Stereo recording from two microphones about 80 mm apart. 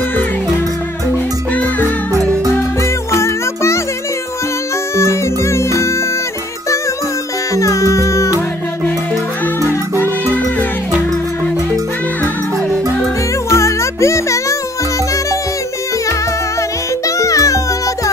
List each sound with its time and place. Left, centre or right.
1.5 s music: left
3.1 s music: left
4.9 s music: left
7.5 s music: left
9.6 s music: left
13.5 s music: left
17.2 s music: left